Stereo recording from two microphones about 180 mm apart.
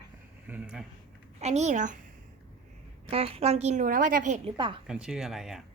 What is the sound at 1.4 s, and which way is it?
Speech, 40° right (ahead or behind).